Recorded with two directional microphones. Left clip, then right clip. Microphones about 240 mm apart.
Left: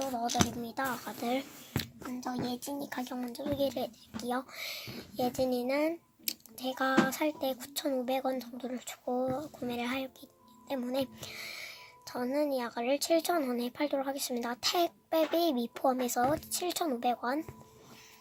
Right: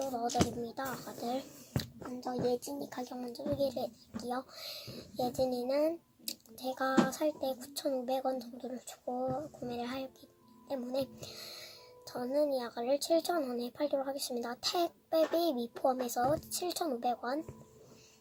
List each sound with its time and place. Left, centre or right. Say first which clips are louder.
0.2 s speech: left 1 dB; left